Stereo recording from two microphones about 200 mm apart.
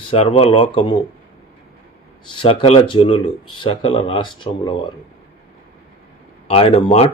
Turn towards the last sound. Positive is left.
turn(degrees=30)  # may be behind; listen again after turning